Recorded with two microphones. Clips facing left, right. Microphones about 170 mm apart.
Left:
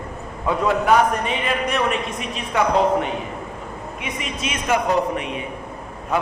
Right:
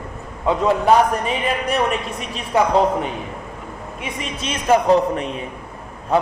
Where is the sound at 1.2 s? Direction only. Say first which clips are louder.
Right 1 dB; 35° right (ahead or behind).